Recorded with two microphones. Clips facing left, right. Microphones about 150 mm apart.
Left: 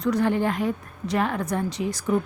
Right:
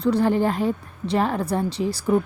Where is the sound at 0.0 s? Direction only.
30° right (ahead or behind).